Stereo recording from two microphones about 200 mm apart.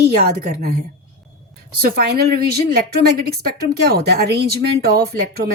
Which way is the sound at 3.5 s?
55° right (ahead or behind).